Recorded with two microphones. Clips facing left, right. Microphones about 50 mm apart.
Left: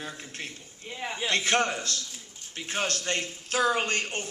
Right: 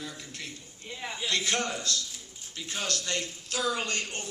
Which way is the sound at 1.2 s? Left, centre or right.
Left.